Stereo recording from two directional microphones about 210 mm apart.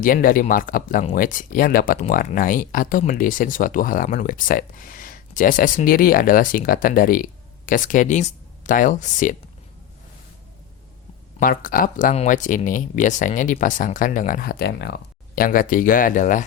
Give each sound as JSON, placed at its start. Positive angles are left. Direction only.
{"t": 0.0, "sound": "speech", "side_deg": 40}
{"t": 11.3, "sound": "speech", "side_deg": 40}